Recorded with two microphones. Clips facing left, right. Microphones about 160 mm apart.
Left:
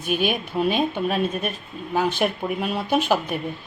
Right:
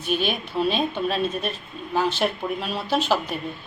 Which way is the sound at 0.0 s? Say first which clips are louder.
Left 2 dB; 10° left (ahead or behind).